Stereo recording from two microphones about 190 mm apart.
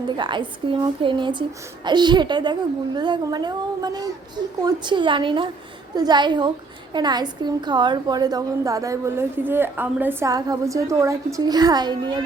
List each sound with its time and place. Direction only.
0.2 s a child's voice: 25° right (ahead or behind)